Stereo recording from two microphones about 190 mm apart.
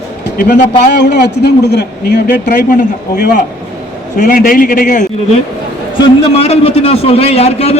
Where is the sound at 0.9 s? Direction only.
60° left (ahead or behind).